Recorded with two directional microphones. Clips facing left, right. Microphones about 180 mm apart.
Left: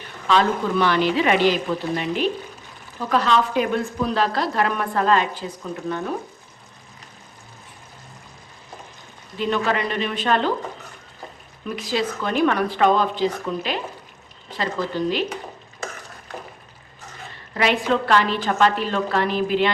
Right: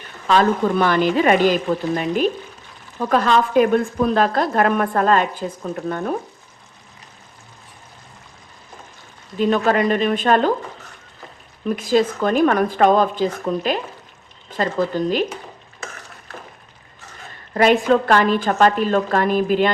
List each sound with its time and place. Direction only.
0.3 s a woman's voice: 45° right (ahead or behind)
9.4 s a woman's voice: 45° right (ahead or behind)
11.8 s a woman's voice: 45° right (ahead or behind)
17.5 s a woman's voice: 45° right (ahead or behind)